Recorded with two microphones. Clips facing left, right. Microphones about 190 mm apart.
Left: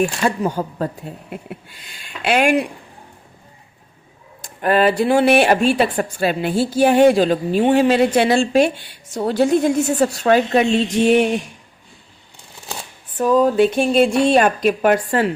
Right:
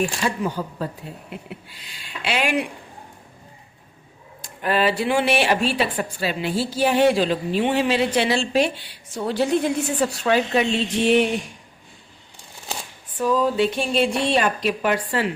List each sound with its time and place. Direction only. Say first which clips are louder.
0.3 s speech: left 5 dB; 50° left (ahead or behind)
4.4 s speech: left 5 dB; 50° left (ahead or behind)
13.1 s speech: left 5 dB; 50° left (ahead or behind)